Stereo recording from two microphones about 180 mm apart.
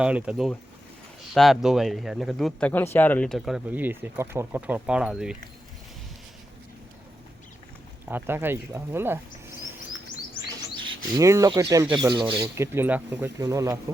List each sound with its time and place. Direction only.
0.0 s speech: 5° right (ahead or behind)
8.1 s speech: 10° right (ahead or behind)
10.8 s bird: 25° right (ahead or behind)
11.3 s speech: 15° right (ahead or behind)
12.1 s speech: 25° right (ahead or behind)
12.5 s speech: 10° right (ahead or behind)